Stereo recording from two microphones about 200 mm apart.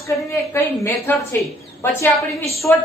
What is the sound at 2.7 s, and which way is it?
Speech, 10° left (ahead or behind).